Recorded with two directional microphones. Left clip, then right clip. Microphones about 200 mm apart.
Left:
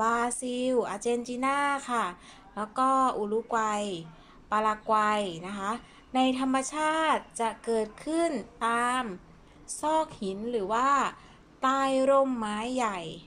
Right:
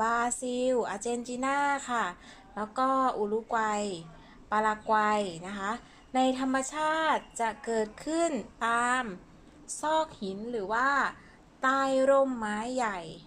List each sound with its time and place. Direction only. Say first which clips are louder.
0.0 s a woman's voice: left 1 dB; 5° left (ahead or behind)